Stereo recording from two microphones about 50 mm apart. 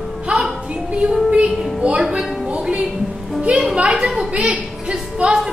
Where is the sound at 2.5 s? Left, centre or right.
Right.